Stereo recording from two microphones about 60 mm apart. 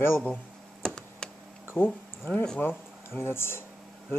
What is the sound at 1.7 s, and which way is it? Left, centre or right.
Speech, left.